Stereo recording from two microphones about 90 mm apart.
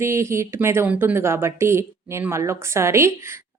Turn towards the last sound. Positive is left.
turn(degrees=-30)  # may be behind; listen again after turning